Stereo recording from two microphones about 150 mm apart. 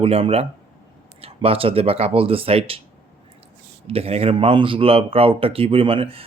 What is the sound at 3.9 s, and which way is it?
Speech, 40° right (ahead or behind).